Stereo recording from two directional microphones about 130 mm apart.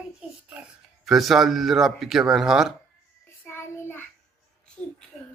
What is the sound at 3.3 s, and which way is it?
Child singing, 20° left (ahead or behind).